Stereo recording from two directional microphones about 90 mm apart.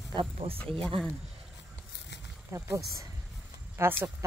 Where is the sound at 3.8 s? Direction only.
25° right (ahead or behind).